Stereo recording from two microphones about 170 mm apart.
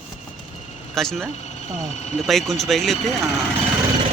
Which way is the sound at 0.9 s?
Centre (ahead or behind).